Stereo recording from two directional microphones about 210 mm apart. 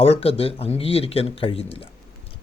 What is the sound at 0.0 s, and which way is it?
Speech, 30° left (ahead or behind).